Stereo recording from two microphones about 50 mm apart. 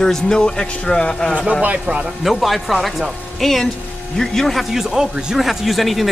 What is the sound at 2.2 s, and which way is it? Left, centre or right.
Speech, centre.